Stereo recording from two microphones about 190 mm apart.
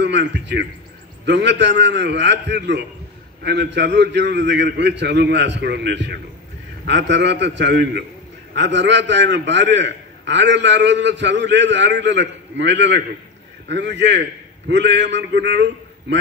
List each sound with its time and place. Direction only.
0.0 s a man's voice: 65° right (ahead or behind)